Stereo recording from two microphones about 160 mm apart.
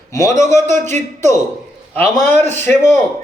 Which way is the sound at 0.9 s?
50° right (ahead or behind).